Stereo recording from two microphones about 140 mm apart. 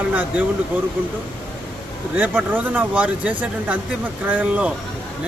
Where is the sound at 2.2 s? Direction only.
15° right (ahead or behind).